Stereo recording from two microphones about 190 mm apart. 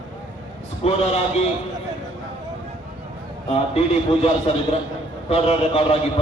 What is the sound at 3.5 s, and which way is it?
A man's voice, 30° left (ahead or behind).